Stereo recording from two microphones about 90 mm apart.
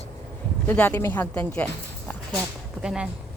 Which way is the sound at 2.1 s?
20° left (ahead or behind).